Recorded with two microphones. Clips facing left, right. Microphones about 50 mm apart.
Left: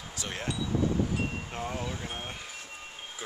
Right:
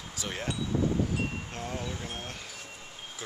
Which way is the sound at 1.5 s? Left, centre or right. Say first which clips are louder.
Left 2 dB; centre.